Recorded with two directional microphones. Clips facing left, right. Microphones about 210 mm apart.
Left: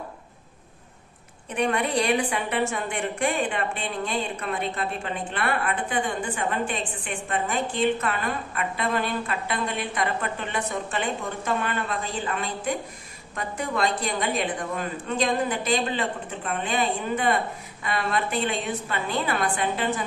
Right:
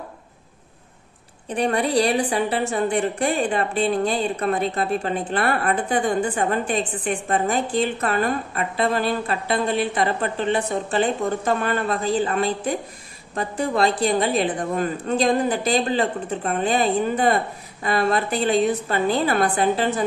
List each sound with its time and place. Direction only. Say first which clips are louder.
1.5 s a woman's voice: right 4 dB; 35° right (ahead or behind)